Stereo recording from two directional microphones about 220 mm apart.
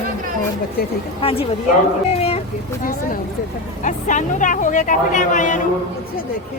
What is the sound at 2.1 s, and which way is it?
Dog, 25° left (ahead or behind).